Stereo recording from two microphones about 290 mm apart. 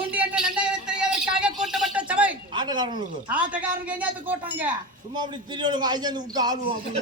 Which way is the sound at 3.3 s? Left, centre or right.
Centre.